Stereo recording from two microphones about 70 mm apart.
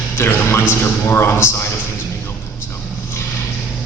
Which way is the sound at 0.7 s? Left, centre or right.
Left.